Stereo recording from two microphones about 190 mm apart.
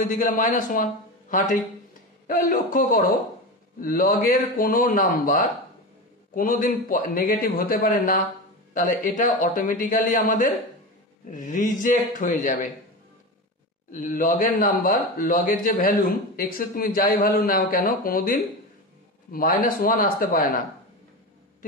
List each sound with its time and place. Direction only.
0.0 s a man's voice: 45° left (ahead or behind)
2.2 s a man's voice: 45° left (ahead or behind)
13.9 s a man's voice: 45° left (ahead or behind)